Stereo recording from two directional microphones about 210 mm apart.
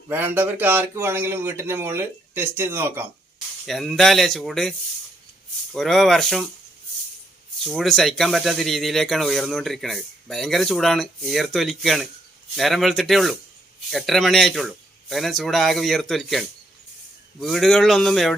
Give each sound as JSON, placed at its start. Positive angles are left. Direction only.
{"t": 0.1, "sound": "speech", "side_deg": -10}
{"t": 3.7, "sound": "speech", "side_deg": 0}
{"t": 5.7, "sound": "speech", "side_deg": 0}
{"t": 7.7, "sound": "speech", "side_deg": 0}
{"t": 17.4, "sound": "speech", "side_deg": 0}